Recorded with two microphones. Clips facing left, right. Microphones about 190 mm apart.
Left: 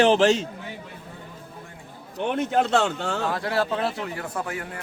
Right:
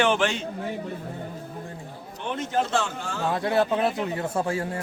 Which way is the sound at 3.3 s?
25° right (ahead or behind).